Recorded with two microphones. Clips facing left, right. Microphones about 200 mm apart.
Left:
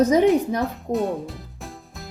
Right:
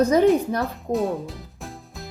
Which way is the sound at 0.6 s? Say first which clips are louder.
Even; centre (ahead or behind).